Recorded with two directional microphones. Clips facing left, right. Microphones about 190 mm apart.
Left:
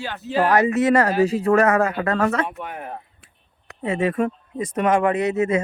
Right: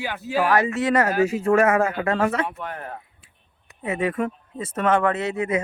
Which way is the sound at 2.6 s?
10° left (ahead or behind).